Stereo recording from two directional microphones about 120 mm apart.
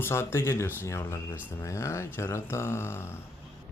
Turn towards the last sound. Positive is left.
turn(degrees=20)  # may be behind; listen again after turning